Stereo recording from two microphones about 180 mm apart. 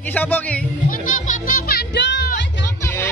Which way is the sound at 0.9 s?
45° left (ahead or behind).